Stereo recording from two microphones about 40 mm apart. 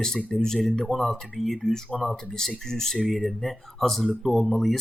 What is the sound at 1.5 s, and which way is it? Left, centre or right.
Speech, centre.